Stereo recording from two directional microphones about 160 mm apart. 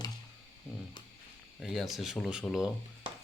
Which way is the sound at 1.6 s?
Centre (ahead or behind).